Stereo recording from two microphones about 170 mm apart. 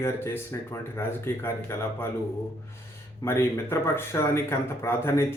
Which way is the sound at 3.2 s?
15° left (ahead or behind).